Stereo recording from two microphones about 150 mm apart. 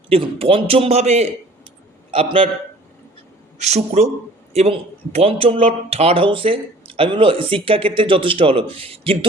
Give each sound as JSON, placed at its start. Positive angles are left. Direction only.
{"t": 0.1, "sound": "a man's voice", "side_deg": -40}
{"t": 2.0, "sound": "a man's voice", "side_deg": -40}
{"t": 4.0, "sound": "a man's voice", "side_deg": -45}